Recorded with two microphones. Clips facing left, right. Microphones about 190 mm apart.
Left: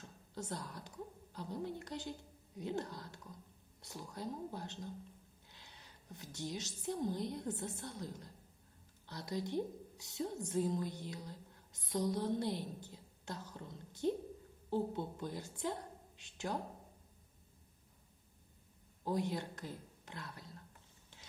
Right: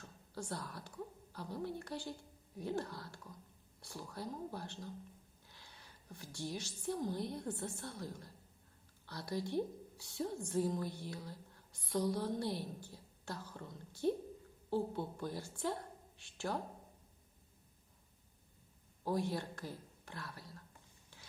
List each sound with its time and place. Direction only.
0.0 s a woman's voice: 20° left (ahead or behind)
19.0 s speech: 20° left (ahead or behind)